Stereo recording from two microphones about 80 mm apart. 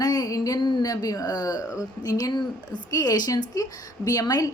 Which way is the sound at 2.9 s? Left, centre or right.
Left.